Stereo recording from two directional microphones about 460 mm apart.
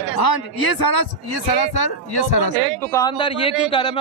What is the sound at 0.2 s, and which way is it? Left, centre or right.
Speech, left.